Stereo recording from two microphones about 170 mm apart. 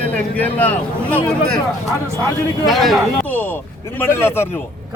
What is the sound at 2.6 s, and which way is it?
Speech, centre (ahead or behind).